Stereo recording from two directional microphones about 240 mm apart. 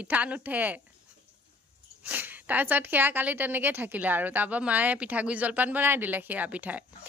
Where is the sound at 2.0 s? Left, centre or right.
Centre.